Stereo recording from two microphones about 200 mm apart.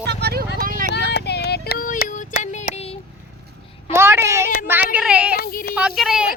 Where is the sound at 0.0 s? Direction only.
55° right (ahead or behind).